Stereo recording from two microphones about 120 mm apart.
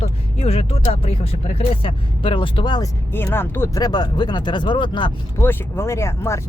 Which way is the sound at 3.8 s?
35° left (ahead or behind).